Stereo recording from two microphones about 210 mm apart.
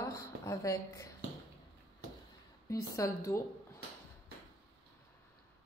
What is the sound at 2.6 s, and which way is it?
Speech, 15° left (ahead or behind).